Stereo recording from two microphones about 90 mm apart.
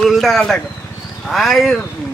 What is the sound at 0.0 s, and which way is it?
Speech, centre (ahead or behind).